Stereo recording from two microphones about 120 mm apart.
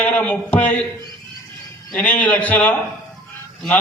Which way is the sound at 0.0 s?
15° left (ahead or behind).